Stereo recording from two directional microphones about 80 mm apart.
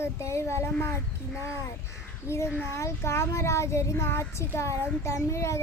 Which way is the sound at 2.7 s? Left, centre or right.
Left.